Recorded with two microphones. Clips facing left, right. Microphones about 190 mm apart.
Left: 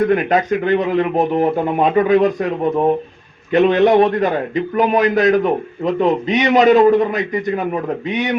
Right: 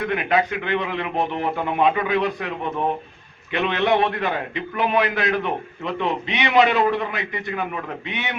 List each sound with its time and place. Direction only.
0.0 s speech: 45° left (ahead or behind)
3.5 s a man's voice: 40° left (ahead or behind)